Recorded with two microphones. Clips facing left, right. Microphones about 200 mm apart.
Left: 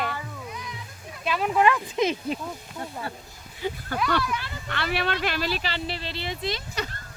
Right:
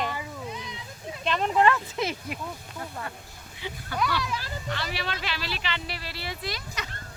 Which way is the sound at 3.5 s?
45° left (ahead or behind).